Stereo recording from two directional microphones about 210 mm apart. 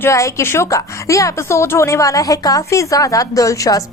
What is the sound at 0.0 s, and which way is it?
A woman's voice, 15° left (ahead or behind).